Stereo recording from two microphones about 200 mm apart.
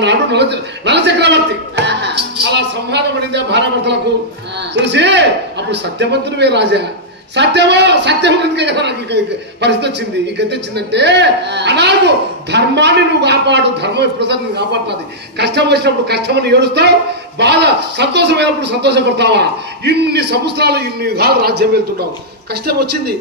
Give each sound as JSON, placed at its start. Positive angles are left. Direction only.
{"t": 0.0, "sound": "a man's voice", "side_deg": -60}